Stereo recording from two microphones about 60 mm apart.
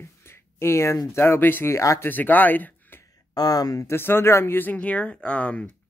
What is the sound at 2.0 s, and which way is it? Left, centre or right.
Speech, left.